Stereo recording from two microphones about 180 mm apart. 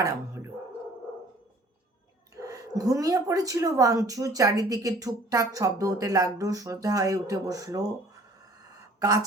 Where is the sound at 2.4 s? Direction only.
20° right (ahead or behind).